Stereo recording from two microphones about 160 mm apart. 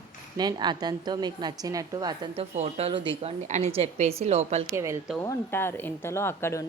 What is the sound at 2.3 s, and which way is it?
A woman's voice, 40° right (ahead or behind).